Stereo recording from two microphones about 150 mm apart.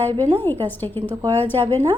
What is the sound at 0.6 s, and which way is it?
Speech, 10° left (ahead or behind).